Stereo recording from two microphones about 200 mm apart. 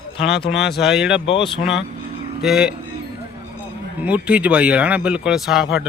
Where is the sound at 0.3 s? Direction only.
55° left (ahead or behind).